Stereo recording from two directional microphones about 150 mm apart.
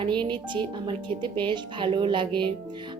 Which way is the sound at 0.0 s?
30° right (ahead or behind).